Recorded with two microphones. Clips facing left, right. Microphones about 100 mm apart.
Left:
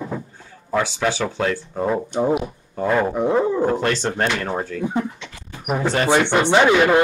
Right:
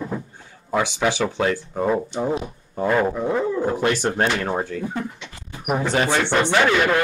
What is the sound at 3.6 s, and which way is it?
Speech, 10° right (ahead or behind).